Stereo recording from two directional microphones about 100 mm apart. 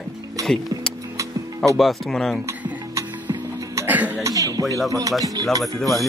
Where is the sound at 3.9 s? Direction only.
15° right (ahead or behind).